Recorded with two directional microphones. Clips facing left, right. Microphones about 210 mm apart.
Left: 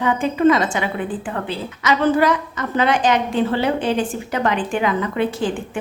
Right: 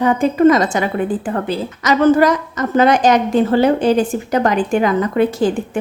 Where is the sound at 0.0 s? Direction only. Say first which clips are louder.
Right 4 dB; 40° right (ahead or behind).